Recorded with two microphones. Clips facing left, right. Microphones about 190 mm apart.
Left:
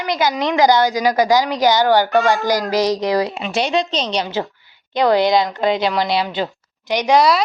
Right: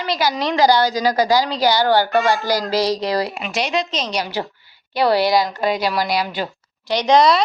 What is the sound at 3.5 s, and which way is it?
Speech, 30° left (ahead or behind).